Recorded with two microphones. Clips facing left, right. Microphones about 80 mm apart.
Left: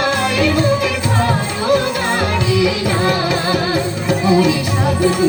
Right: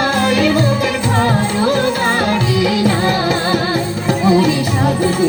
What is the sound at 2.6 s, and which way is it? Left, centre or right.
Music, right.